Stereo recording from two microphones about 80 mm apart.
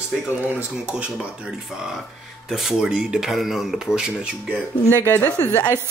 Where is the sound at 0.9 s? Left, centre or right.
Centre.